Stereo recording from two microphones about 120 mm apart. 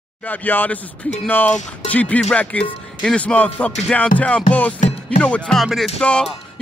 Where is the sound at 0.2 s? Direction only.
15° left (ahead or behind).